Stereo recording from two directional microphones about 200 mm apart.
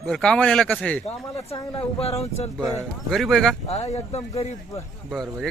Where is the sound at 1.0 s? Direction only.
30° left (ahead or behind).